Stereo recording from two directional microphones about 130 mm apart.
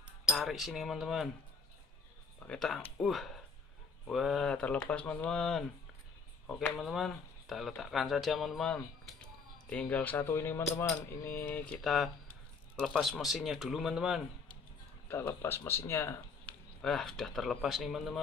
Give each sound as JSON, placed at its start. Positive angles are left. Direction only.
{"t": 0.0, "sound": "cutlery", "side_deg": -5}
{"t": 2.4, "sound": "speech", "side_deg": 5}
{"t": 11.8, "sound": "speech", "side_deg": 0}
{"t": 15.0, "sound": "speech", "side_deg": 20}
{"t": 16.8, "sound": "speech", "side_deg": 5}